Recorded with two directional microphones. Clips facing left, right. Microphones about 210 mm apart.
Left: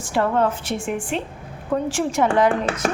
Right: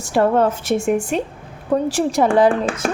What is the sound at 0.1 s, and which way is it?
Speech, 40° right (ahead or behind).